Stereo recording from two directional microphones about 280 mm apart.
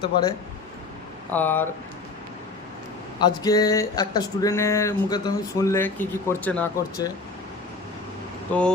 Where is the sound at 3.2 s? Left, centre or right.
Centre.